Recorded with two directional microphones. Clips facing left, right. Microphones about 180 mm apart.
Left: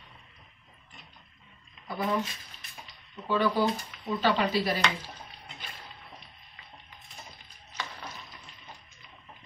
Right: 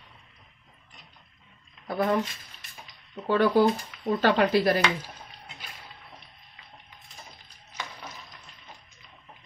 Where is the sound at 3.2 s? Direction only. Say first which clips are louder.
Right 5 dB; 55° right (ahead or behind).